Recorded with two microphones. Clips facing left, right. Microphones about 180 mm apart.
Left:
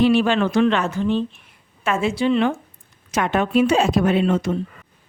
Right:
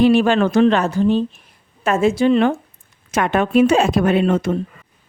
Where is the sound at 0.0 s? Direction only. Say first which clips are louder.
Right 3 dB; 45° right (ahead or behind).